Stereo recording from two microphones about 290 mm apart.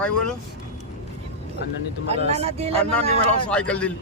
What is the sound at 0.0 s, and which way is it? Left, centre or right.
Speech, centre.